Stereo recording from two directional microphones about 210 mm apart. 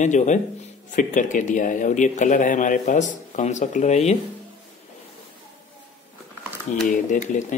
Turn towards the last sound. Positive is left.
turn(degrees=35)  # may be behind; listen again after turning